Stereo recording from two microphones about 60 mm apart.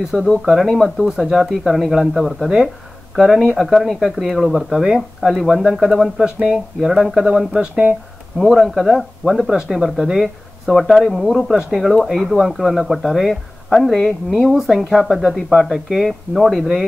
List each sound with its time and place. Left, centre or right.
0.1 s speech: centre
1.0 s speech: centre
1.4 s speech: centre
8.4 s speech: centre